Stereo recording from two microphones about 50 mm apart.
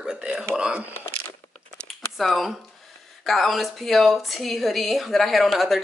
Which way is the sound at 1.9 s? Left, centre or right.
Centre.